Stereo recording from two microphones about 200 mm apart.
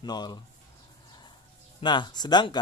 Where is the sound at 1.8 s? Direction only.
25° left (ahead or behind).